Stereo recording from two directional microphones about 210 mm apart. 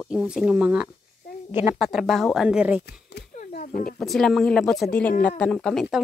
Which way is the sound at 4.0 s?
Centre (ahead or behind).